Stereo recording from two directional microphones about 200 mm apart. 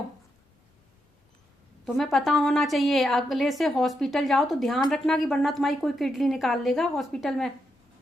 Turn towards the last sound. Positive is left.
turn(degrees=0)  # may be behind; listen again after turning